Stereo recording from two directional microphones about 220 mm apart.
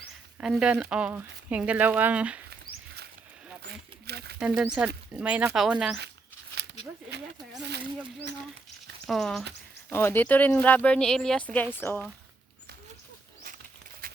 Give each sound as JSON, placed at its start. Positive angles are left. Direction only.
{"t": 0.3, "sound": "speech", "side_deg": -5}
{"t": 2.5, "sound": "patter", "side_deg": -45}
{"t": 3.6, "sound": "a sound", "side_deg": -50}
{"t": 4.4, "sound": "speech", "side_deg": -5}
{"t": 9.0, "sound": "speech", "side_deg": 0}
{"t": 14.0, "sound": "a sound", "side_deg": -40}